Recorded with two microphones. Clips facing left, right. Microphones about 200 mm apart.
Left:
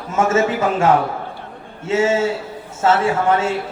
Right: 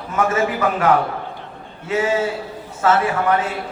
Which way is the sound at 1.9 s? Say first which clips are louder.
Left 3 dB; 25° left (ahead or behind).